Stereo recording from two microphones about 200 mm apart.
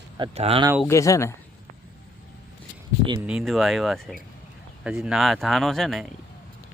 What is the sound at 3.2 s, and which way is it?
Speech, centre (ahead or behind).